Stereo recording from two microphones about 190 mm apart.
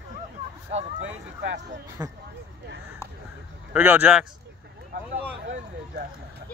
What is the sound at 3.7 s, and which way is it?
Speech, 10° right (ahead or behind).